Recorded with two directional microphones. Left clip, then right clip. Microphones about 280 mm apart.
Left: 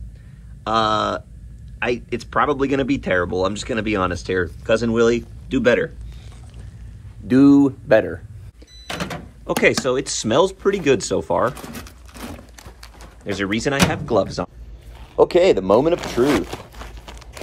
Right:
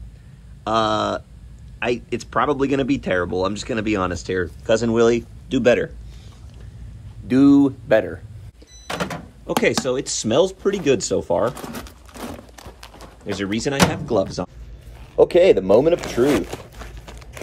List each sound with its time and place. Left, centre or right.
0.7 s speech: centre
7.2 s speech: centre
9.5 s speech: centre
11.7 s a sound: right
13.2 s speech: centre
15.2 s speech: centre